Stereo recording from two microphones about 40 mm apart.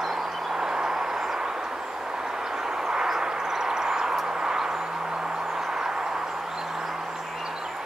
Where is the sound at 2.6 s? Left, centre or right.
Centre.